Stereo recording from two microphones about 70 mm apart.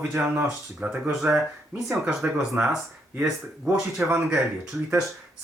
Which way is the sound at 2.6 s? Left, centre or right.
Right.